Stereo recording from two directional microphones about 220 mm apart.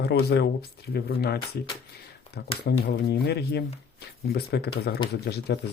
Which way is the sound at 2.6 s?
50° left (ahead or behind).